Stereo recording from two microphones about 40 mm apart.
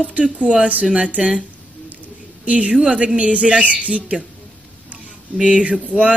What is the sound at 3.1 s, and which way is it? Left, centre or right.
Speech, right.